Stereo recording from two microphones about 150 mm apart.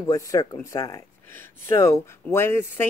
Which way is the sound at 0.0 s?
25° left (ahead or behind).